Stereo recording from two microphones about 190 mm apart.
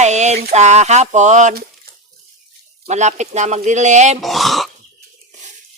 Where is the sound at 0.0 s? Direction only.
35° right (ahead or behind).